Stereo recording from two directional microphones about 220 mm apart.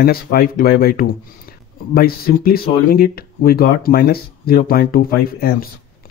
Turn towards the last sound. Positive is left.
turn(degrees=45)  # may be behind; listen again after turning